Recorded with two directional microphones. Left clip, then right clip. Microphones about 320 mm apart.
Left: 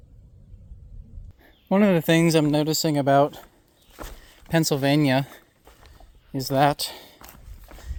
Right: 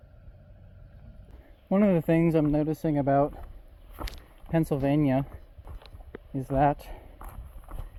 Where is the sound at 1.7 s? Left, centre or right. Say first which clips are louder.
Left 4 dB; left.